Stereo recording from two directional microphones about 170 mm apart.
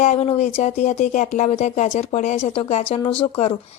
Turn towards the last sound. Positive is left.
turn(degrees=35)  # may be behind; listen again after turning